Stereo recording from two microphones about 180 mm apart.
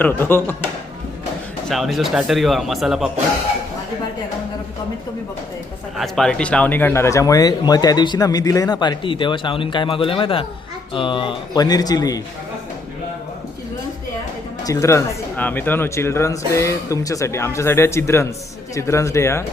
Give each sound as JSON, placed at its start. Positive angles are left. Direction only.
{"t": 0.0, "sound": "speech", "side_deg": 10}
{"t": 1.7, "sound": "speech", "side_deg": 0}
{"t": 6.0, "sound": "speech", "side_deg": 5}
{"t": 14.6, "sound": "speech", "side_deg": 15}